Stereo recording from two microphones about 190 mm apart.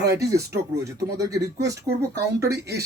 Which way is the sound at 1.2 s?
20° right (ahead or behind).